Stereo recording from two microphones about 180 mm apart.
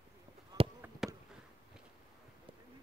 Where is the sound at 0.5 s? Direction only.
20° right (ahead or behind).